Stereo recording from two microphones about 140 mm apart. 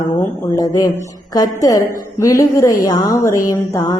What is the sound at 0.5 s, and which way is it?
A woman's voice, 25° left (ahead or behind).